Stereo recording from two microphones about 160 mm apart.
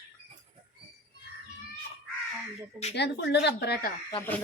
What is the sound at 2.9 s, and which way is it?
Speech, 90° left.